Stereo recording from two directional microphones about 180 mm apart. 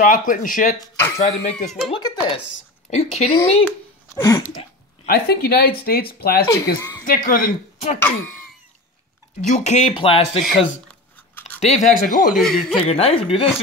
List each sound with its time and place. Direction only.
0.0 s speech: 50° left (ahead or behind)
0.7 s speech: 15° left (ahead or behind)
1.5 s speech: 5° left (ahead or behind)
1.9 s speech: 25° left (ahead or behind)
2.9 s speech: 40° left (ahead or behind)
4.1 s a sound: 15° left (ahead or behind)
5.0 s speech: 55° left (ahead or behind)
6.4 s speech: 15° left (ahead or behind)
7.2 s speech: 50° left (ahead or behind)
9.4 s speech: 40° left (ahead or behind)
11.6 s speech: 40° left (ahead or behind)
12.4 s speech: centre (ahead or behind)
12.8 s speech: 35° left (ahead or behind)